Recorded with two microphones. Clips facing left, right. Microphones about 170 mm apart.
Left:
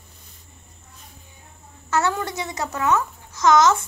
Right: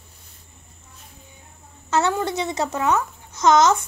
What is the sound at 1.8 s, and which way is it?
A child's voice, 20° right (ahead or behind).